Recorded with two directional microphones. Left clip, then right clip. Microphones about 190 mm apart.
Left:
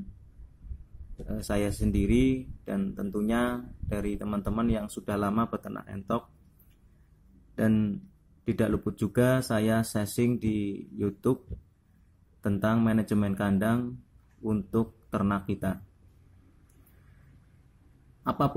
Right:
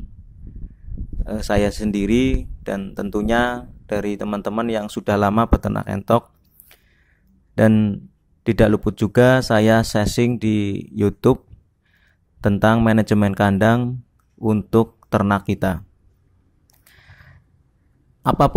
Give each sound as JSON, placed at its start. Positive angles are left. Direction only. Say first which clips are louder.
{"t": 1.3, "sound": "speech", "louder": "right 11 dB", "side_deg": -40}
{"t": 7.5, "sound": "speech", "louder": "right 12 dB", "side_deg": -45}
{"t": 12.4, "sound": "speech", "louder": "right 12 dB", "side_deg": -45}
{"t": 18.2, "sound": "speech", "louder": "right 12 dB", "side_deg": -45}